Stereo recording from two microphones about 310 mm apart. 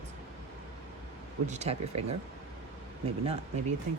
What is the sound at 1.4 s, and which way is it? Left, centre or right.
Speech, right.